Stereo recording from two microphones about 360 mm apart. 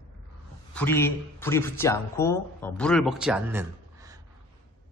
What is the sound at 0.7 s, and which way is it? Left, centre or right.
Speech, centre.